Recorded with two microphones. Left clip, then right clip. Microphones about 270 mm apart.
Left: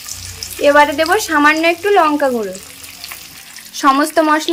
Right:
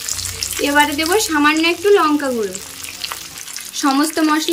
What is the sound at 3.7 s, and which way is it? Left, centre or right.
Speech, centre.